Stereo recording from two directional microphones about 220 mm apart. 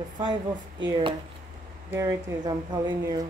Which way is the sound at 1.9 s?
15° right (ahead or behind).